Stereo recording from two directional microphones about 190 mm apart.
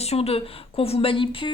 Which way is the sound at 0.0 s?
35° left (ahead or behind).